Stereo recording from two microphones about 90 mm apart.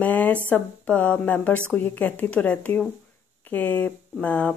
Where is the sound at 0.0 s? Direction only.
15° left (ahead or behind).